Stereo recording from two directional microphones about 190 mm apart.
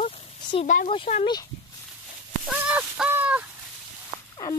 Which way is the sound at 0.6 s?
40° left (ahead or behind).